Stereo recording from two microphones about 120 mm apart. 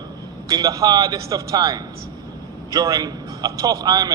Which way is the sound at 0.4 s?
30° right (ahead or behind).